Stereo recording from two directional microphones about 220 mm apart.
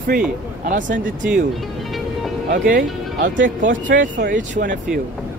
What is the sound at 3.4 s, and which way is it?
Speech, 35° right (ahead or behind).